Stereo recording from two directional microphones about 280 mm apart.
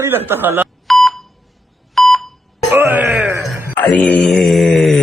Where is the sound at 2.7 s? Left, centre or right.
Centre.